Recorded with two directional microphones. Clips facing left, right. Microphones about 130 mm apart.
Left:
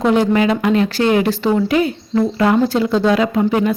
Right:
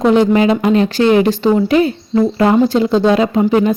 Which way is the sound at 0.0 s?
20° right (ahead or behind).